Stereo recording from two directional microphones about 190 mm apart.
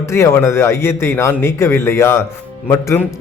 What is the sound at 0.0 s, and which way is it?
Speech, 15° left (ahead or behind).